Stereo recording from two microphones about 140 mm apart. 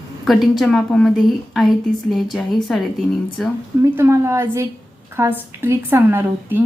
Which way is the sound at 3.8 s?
20° right (ahead or behind).